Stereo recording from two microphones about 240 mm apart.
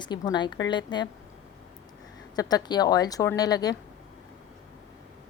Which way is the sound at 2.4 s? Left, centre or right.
Centre.